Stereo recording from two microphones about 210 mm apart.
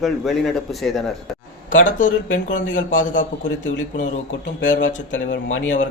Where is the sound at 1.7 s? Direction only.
40° left (ahead or behind).